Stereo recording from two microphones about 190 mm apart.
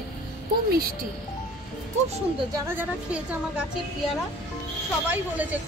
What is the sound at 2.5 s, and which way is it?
A woman's voice, 10° right (ahead or behind).